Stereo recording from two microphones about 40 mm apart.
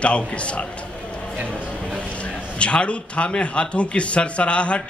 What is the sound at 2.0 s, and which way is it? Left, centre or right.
A man's voice, left.